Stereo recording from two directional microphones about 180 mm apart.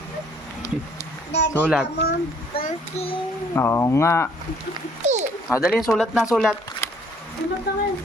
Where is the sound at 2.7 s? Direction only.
35° left (ahead or behind).